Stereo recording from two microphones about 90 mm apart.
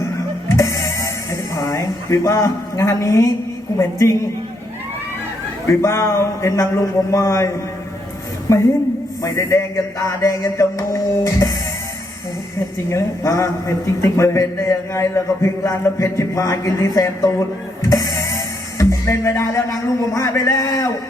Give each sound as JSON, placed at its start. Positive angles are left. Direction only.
{"t": 0.4, "sound": "music", "side_deg": 35}
{"t": 1.6, "sound": "a woman's voice", "side_deg": 35}
{"t": 5.6, "sound": "a woman's voice", "side_deg": 35}
{"t": 8.5, "sound": "a woman's voice", "side_deg": 35}
{"t": 12.5, "sound": "a woman's voice", "side_deg": 35}
{"t": 17.8, "sound": "music", "side_deg": 35}
{"t": 20.1, "sound": "a woman's voice", "side_deg": 35}